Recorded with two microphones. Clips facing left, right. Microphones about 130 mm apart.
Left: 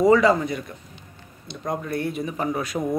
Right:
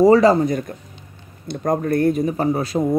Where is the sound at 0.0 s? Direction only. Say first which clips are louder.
Right 5 dB; 35° right (ahead or behind).